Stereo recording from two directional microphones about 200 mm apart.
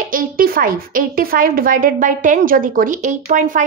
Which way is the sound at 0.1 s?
45° right (ahead or behind).